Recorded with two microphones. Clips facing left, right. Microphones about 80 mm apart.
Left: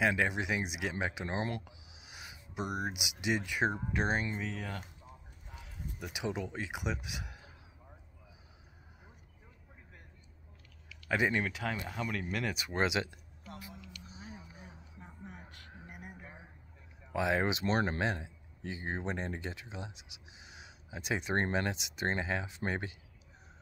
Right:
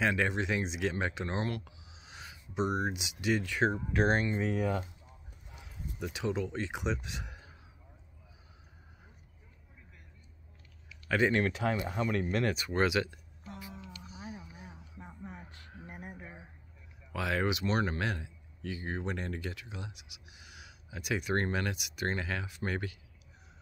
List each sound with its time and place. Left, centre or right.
0.0 s speech: centre
4.5 s speech: right
5.9 s speech: centre
11.1 s speech: centre
12.4 s speech: centre
13.7 s music: right
14.2 s a sound: centre
17.1 s speech: left